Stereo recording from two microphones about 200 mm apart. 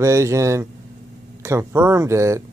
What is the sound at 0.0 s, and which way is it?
Speech, 15° right (ahead or behind).